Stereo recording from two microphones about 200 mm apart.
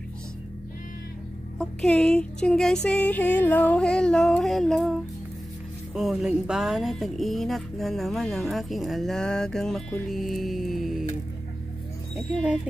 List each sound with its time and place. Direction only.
1.6 s speech: centre (ahead or behind)